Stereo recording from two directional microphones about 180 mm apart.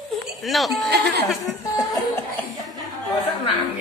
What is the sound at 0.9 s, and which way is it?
Speech, 65° right (ahead or behind).